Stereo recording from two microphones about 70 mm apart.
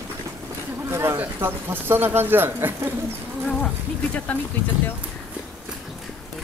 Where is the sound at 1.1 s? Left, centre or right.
Right.